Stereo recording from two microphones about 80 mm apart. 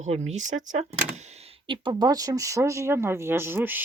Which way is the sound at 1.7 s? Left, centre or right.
Right.